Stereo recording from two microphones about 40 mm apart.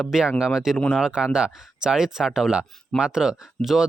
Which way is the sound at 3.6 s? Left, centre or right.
Centre.